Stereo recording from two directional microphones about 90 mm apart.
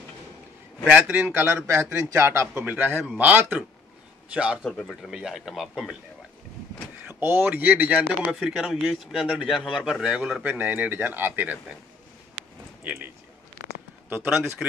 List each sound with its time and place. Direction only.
0.8 s speech: 15° right (ahead or behind)
4.6 s speech: 10° left (ahead or behind)
5.0 s a man's voice: 5° right (ahead or behind)
7.2 s a man's voice: 20° right (ahead or behind)
10.4 s speech: 20° right (ahead or behind)
12.8 s speech: 15° right (ahead or behind)
14.6 s speech: 5° right (ahead or behind)